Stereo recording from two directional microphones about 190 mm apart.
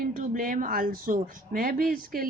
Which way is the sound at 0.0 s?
45° right (ahead or behind).